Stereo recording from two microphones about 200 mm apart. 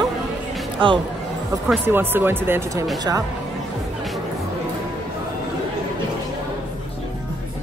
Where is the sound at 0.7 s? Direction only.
25° right (ahead or behind).